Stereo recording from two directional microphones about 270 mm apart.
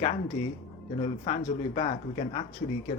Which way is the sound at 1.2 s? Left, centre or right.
Left.